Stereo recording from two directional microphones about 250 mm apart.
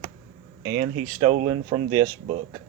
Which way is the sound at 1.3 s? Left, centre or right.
Right.